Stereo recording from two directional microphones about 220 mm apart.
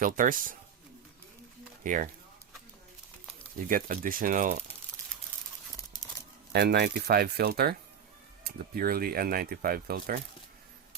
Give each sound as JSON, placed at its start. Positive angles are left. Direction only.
{"t": 0.0, "sound": "speech", "side_deg": -40}
{"t": 1.8, "sound": "speech", "side_deg": -35}
{"t": 3.6, "sound": "speech", "side_deg": -40}
{"t": 6.5, "sound": "speech", "side_deg": -45}